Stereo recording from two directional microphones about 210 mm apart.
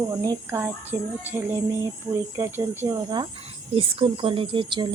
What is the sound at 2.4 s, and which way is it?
Speech, 10° right (ahead or behind).